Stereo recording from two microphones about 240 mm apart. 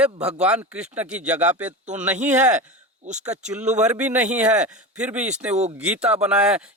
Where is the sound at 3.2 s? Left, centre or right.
Centre.